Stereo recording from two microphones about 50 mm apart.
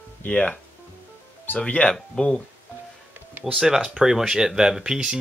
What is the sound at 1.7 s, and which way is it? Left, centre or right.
Speech, left.